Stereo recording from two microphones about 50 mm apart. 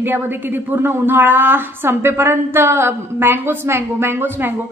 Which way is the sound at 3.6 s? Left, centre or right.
Right.